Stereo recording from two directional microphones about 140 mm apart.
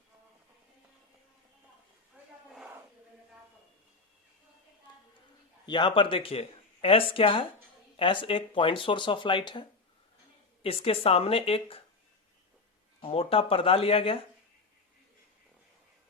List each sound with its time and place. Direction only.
2.5 s a sound: 5° right (ahead or behind)
5.6 s speech: 35° left (ahead or behind)
13.0 s speech: 45° left (ahead or behind)